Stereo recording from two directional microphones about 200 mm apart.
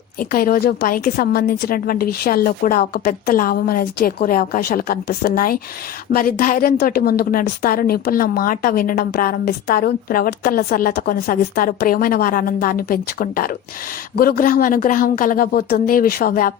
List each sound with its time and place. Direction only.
0.2 s a woman's voice: 45° left (ahead or behind)